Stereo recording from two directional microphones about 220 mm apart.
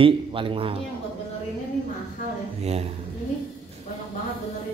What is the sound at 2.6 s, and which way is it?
Speech, 30° right (ahead or behind).